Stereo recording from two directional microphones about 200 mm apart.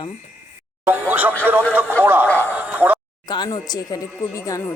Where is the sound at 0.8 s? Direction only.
10° right (ahead or behind).